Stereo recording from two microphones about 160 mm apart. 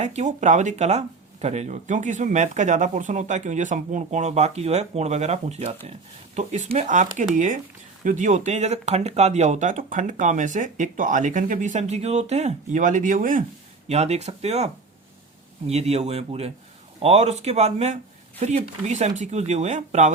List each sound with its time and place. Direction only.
0.0 s speech: 45° right (ahead or behind)
13.8 s speech: 45° right (ahead or behind)